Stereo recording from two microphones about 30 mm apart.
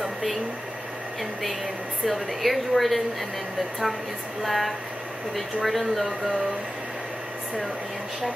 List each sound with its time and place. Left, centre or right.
0.0 s a sound: centre
2.0 s speech: centre
4.4 s speech: centre